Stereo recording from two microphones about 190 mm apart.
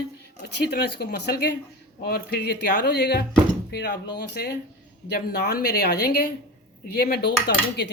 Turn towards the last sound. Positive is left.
turn(degrees=60)  # may be behind; listen again after turning